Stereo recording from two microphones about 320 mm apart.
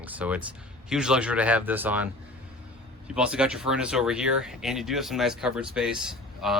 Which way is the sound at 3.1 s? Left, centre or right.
Centre.